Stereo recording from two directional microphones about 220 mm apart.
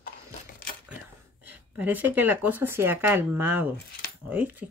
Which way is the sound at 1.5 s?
10° right (ahead or behind).